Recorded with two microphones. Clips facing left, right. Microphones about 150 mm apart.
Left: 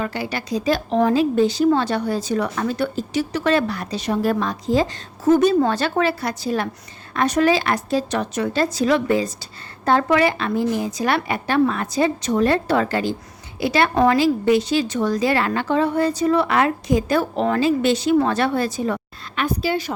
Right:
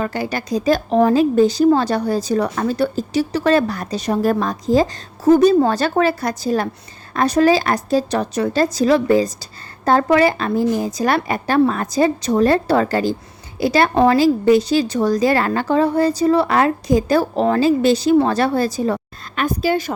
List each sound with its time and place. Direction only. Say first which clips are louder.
0.0 s a woman's voice: right 3 dB; 45° right (ahead or behind)